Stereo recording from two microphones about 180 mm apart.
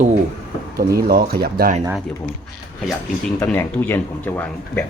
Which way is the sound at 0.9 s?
55° right (ahead or behind).